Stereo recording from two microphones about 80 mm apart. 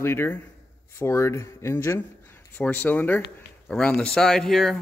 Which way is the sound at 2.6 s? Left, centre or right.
Left.